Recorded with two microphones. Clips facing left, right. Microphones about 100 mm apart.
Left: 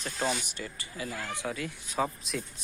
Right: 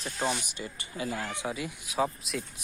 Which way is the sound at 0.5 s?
20° right (ahead or behind).